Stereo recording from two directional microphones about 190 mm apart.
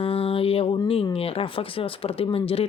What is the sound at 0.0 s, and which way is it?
Speech, 30° left (ahead or behind).